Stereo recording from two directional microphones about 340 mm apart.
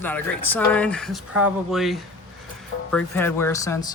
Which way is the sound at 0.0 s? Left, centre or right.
Centre.